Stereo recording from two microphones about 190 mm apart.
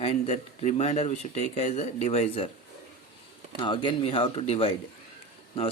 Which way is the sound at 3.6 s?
25° left (ahead or behind).